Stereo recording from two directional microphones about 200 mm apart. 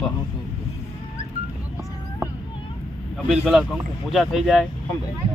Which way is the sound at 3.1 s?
Centre (ahead or behind).